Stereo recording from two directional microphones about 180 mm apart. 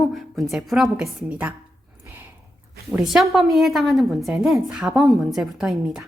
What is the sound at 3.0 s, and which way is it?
A woman's voice, centre (ahead or behind).